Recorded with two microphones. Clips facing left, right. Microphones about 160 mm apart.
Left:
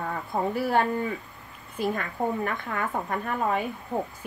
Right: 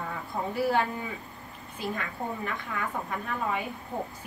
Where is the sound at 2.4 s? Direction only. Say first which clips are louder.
Left 4 dB; 50° left (ahead or behind).